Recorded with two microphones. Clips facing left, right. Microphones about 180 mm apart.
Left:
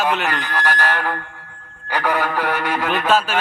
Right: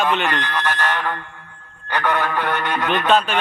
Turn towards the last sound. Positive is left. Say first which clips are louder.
# right 1 dB
turn(degrees=5)  # may be behind; listen again after turning